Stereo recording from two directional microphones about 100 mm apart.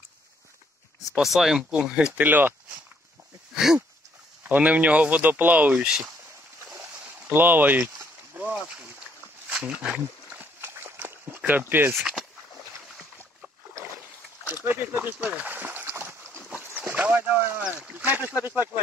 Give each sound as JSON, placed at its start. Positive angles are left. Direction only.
{"t": 1.1, "sound": "speech", "side_deg": 0}
{"t": 2.1, "sound": "speech", "side_deg": -20}
{"t": 3.5, "sound": "a sound", "side_deg": -5}
{"t": 4.4, "sound": "speech", "side_deg": -15}
{"t": 7.2, "sound": "boat", "side_deg": -20}
{"t": 9.5, "sound": "speech", "side_deg": -10}
{"t": 10.6, "sound": "a sound", "side_deg": -25}
{"t": 11.9, "sound": "speech", "side_deg": -5}
{"t": 14.5, "sound": "a sound", "side_deg": -20}
{"t": 17.6, "sound": "speech", "side_deg": -10}